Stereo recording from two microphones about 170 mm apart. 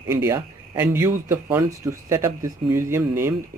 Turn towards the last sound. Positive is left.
turn(degrees=-15)  # may be behind; listen again after turning